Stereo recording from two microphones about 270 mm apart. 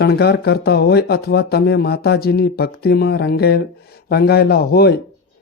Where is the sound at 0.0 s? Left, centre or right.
Left.